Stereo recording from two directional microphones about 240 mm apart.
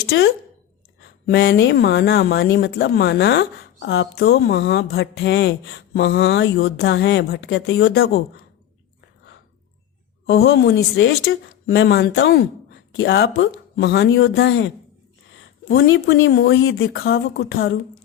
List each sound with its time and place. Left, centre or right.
0.0 s speech: left
10.2 s speech: left